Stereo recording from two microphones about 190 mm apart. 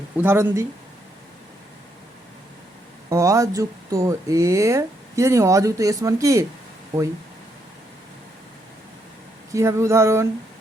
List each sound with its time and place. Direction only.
0.2 s speech: 10° right (ahead or behind)
3.1 s speech: 15° right (ahead or behind)
9.5 s speech: 15° right (ahead or behind)